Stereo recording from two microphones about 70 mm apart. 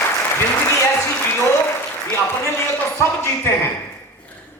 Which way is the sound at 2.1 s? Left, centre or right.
Left.